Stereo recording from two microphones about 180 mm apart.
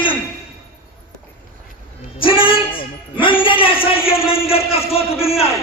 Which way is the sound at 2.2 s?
30° left (ahead or behind).